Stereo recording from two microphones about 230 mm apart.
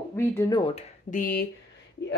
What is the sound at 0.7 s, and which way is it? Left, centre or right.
Speech, left.